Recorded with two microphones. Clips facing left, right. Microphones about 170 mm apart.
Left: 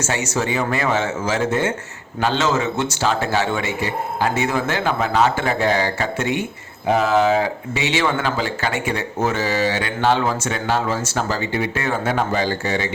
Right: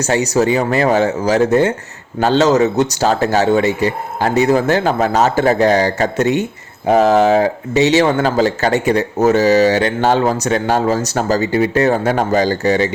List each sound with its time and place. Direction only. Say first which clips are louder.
0.0 s speech: right 8 dB; 40° right (ahead or behind)